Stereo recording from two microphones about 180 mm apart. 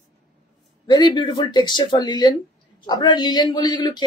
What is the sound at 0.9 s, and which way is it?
Speech, 25° left (ahead or behind).